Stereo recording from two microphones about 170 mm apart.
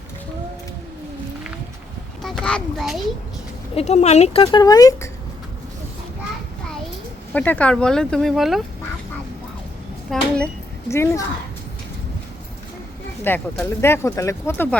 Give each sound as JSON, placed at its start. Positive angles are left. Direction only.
{"t": 2.2, "sound": "a child's voice", "side_deg": 5}
{"t": 3.8, "sound": "speech", "side_deg": 40}
{"t": 4.5, "sound": "speech", "side_deg": 20}
{"t": 7.3, "sound": "speech", "side_deg": 10}
{"t": 10.1, "sound": "speech", "side_deg": 5}
{"t": 10.8, "sound": "speech", "side_deg": 15}
{"t": 13.2, "sound": "speech", "side_deg": 10}